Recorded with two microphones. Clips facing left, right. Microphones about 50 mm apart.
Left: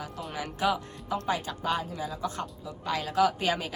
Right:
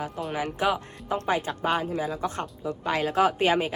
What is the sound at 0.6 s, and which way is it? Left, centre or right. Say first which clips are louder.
Speech: even; right.